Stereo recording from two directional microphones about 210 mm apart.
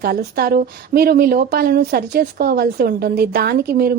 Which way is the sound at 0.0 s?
50° right (ahead or behind).